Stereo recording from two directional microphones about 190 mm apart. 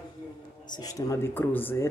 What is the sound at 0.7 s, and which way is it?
Speech, 20° left (ahead or behind).